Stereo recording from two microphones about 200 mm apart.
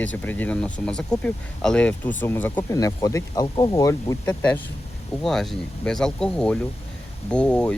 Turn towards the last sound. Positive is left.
turn(degrees=5)  # may be behind; listen again after turning